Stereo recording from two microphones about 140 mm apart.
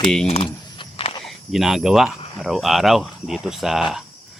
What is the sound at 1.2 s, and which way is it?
Speech, centre (ahead or behind).